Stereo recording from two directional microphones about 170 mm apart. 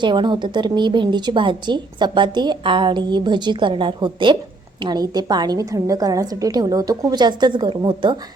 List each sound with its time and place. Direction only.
0.0 s a woman's voice: 25° right (ahead or behind)